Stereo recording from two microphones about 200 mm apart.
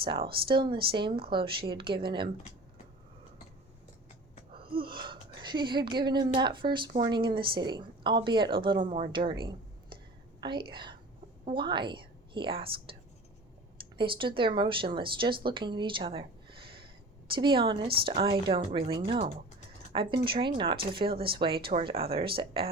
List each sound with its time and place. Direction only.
0.0 s speech: 25° right (ahead or behind)
4.5 s a woman's voice: 25° right (ahead or behind)
14.0 s speech: 25° right (ahead or behind)
17.2 s speech: 25° right (ahead or behind)